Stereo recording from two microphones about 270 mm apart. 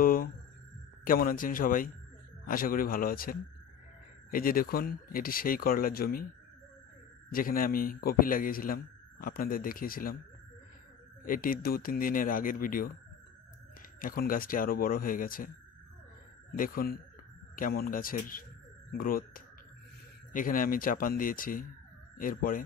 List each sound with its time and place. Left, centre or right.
0.0 s a sound: left
1.0 s a man's voice: left
7.3 s a man's voice: left
11.2 s a man's voice: left
14.0 s a man's voice: left
16.5 s a man's voice: left